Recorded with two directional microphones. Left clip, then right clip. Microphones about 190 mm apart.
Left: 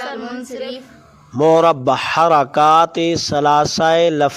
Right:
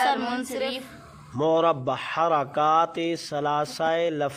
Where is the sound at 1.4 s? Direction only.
45° left (ahead or behind).